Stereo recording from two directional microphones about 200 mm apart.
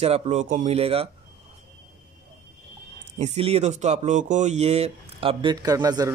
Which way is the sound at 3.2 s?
30° right (ahead or behind).